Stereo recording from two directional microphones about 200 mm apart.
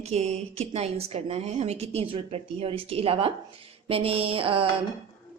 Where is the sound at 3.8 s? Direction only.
30° right (ahead or behind).